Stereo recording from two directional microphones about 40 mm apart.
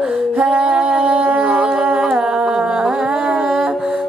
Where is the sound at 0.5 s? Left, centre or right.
Right.